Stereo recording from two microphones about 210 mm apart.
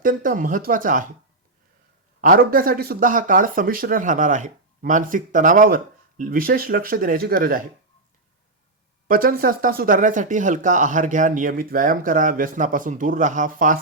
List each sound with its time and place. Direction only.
0.0 s speech: 40° right (ahead or behind)
2.2 s speech: 45° right (ahead or behind)
9.0 s speech: 45° right (ahead or behind)